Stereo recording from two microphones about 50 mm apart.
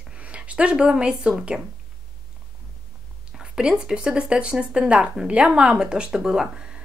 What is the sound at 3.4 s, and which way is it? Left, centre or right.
A woman's voice, centre.